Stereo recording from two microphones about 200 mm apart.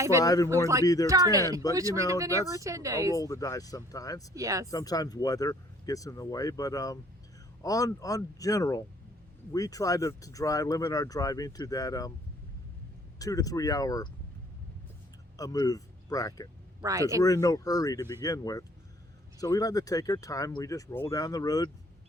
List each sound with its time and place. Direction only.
0.2 s speech: 15° left (ahead or behind)
1.0 s speech: 15° right (ahead or behind)
3.2 s speech: 15° left (ahead or behind)
4.4 s speech: 15° right (ahead or behind)
4.7 s speech: 20° left (ahead or behind)
13.1 s speech: 15° left (ahead or behind)
15.4 s speech: 20° left (ahead or behind)
16.8 s speech: 15° right (ahead or behind)
17.2 s speech: 15° left (ahead or behind)